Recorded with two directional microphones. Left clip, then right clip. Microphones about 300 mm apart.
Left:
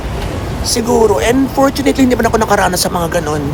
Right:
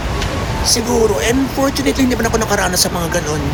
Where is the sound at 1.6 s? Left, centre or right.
Centre.